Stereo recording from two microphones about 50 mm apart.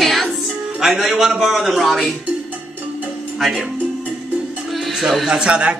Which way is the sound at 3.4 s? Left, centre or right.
Centre.